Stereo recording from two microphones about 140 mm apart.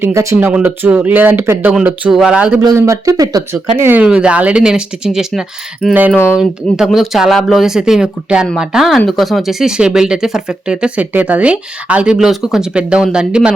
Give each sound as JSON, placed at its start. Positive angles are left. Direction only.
{"t": 0.0, "sound": "speech", "side_deg": -20}
{"t": 2.6, "sound": "speech", "side_deg": -25}
{"t": 3.8, "sound": "speech", "side_deg": -15}
{"t": 5.9, "sound": "speech", "side_deg": -15}